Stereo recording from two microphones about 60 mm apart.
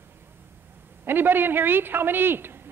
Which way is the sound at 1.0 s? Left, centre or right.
Right.